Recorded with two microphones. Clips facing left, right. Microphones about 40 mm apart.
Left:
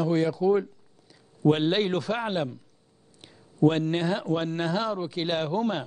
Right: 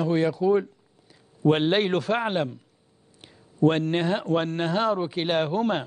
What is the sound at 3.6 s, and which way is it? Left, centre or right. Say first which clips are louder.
A man's voice: right 1 dB; centre.